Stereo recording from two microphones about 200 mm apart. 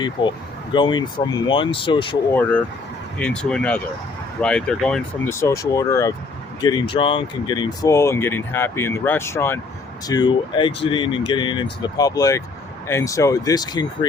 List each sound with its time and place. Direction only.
0.0 s speech: 25° left (ahead or behind)
2.3 s speech: 5° left (ahead or behind)